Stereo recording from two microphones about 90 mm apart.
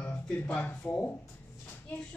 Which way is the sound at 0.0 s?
15° left (ahead or behind).